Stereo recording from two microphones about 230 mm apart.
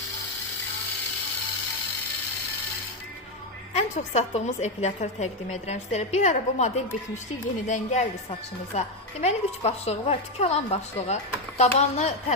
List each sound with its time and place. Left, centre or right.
3.8 s a woman's voice: left